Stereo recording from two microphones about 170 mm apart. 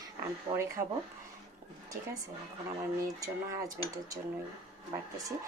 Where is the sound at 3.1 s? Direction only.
20° right (ahead or behind).